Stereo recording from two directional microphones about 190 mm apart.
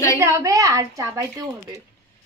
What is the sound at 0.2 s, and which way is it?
Speech, 15° right (ahead or behind).